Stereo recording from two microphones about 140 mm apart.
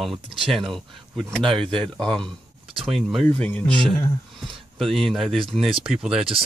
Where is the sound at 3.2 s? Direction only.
10° left (ahead or behind).